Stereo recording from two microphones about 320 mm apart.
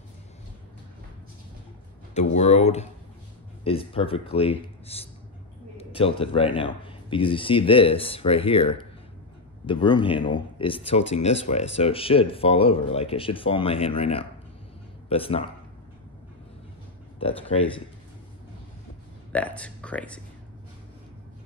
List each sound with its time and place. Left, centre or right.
2.1 s speech: left
17.2 s speech: centre
19.3 s speech: centre